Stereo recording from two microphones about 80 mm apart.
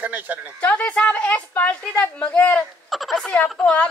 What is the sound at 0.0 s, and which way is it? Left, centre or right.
Speech, right.